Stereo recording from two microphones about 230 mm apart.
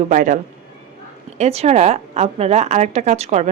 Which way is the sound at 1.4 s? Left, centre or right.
Right.